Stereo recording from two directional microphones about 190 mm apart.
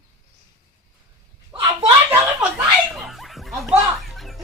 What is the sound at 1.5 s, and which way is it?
Speech, 30° right (ahead or behind).